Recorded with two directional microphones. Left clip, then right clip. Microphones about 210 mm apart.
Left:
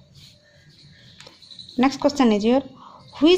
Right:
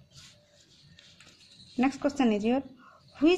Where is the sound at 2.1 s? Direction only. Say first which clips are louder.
Left 8 dB; 60° left (ahead or behind).